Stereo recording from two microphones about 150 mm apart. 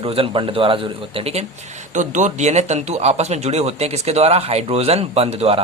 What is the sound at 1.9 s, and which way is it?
Speech, 55° right (ahead or behind).